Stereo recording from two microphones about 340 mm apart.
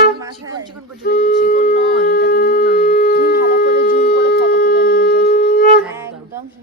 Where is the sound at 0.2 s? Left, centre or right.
Centre.